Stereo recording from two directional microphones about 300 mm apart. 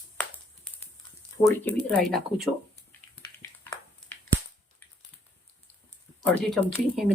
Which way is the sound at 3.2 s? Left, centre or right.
Centre.